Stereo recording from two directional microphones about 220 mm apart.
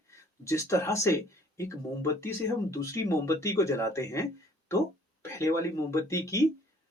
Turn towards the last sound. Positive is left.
turn(degrees=15)  # may be behind; listen again after turning